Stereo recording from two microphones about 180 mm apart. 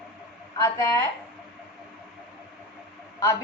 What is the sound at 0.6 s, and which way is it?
Speech, 15° left (ahead or behind).